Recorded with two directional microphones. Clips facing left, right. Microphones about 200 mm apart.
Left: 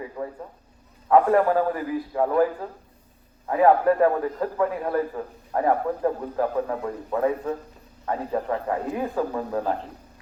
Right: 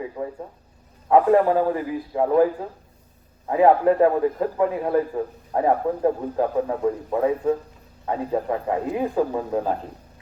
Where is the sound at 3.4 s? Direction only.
20° right (ahead or behind).